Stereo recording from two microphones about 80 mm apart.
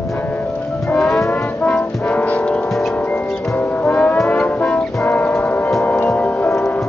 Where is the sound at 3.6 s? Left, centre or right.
Centre.